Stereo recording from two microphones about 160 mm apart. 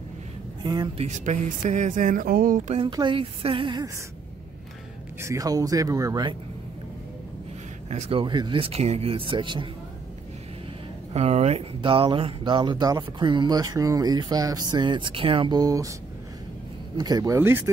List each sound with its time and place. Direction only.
0.9 s speech: 45° right (ahead or behind); by 2.6 s 65° right (ahead or behind)
2.9 s speech: 30° right (ahead or behind)
5.2 s speech: 20° right (ahead or behind)
7.9 s speech: 40° right (ahead or behind)
11.1 s speech: 40° right (ahead or behind); by 15.9 s 20° right (ahead or behind)
16.9 s speech: 25° right (ahead or behind)